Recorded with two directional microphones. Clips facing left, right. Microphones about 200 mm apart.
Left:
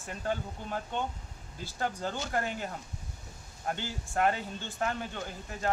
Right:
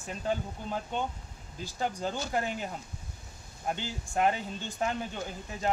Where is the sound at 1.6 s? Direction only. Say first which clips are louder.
Right 1 dB; 15° right (ahead or behind).